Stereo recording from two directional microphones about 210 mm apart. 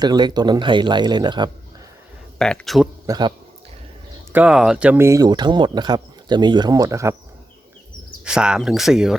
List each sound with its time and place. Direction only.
0.0 s speech: 20° right (ahead or behind)
2.4 s speech: 5° left (ahead or behind)
3.1 s speech: 20° right (ahead or behind)
4.3 s speech: 5° right (ahead or behind)
8.2 s speech: 5° right (ahead or behind)